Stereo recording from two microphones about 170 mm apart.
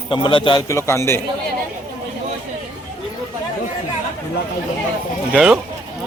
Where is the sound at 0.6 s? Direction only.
15° left (ahead or behind).